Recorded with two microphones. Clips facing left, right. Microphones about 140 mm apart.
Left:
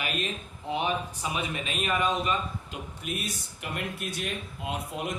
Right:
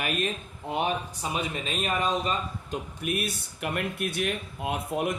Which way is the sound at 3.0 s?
60° right (ahead or behind).